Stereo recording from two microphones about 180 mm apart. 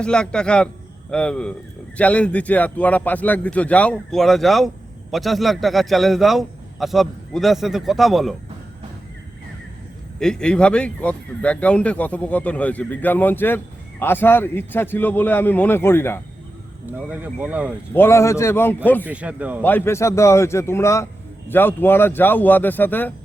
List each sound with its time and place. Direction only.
0.0 s a man's voice: 5° left (ahead or behind)
10.2 s speech: 5° left (ahead or behind)
17.1 s speech: 10° right (ahead or behind)
17.9 s speech: 15° left (ahead or behind)
19.0 s speech: 5° right (ahead or behind)
19.6 s speech: 10° left (ahead or behind)